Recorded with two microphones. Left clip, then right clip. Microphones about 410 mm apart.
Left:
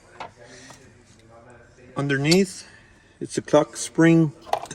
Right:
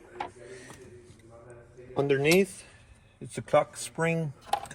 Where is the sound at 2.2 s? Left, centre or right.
Left.